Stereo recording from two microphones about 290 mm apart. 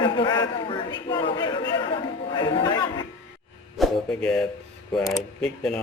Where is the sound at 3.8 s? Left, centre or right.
Centre.